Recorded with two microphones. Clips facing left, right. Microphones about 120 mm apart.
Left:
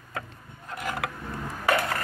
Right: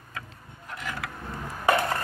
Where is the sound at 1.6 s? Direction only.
25° right (ahead or behind).